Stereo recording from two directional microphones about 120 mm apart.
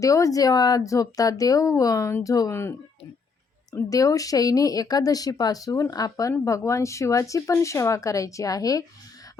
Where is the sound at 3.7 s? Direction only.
30° left (ahead or behind).